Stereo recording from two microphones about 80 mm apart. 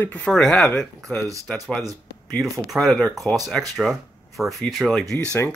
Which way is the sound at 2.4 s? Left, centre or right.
Centre.